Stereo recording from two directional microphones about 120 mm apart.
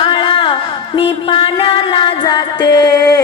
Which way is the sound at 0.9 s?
45° left (ahead or behind).